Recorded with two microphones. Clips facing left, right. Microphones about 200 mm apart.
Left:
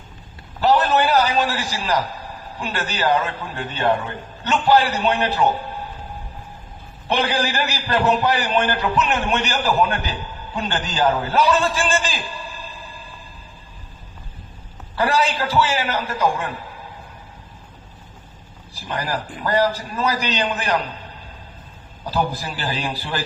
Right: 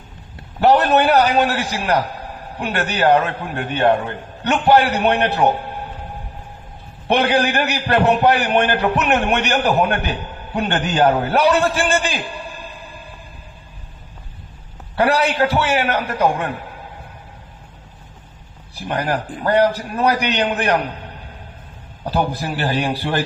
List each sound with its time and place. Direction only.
0.6 s a man's voice: 60° right (ahead or behind)
7.1 s a man's voice: 60° right (ahead or behind)
14.9 s a man's voice: 60° right (ahead or behind)
18.7 s a man's voice: 60° right (ahead or behind)
22.0 s a man's voice: 60° right (ahead or behind)